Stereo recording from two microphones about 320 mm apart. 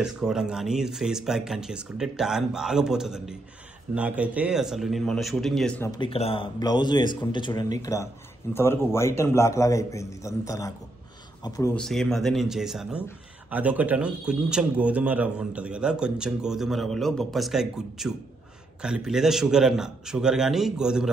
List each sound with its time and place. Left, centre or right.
0.0 s a man's voice: centre